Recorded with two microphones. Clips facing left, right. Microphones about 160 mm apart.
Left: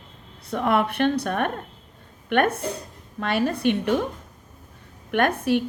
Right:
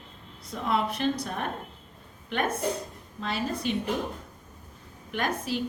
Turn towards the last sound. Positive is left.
turn(degrees=60)  # may be behind; listen again after turning